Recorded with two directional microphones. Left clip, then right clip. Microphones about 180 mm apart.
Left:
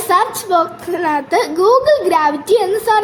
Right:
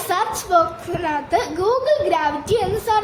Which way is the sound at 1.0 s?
30° left (ahead or behind).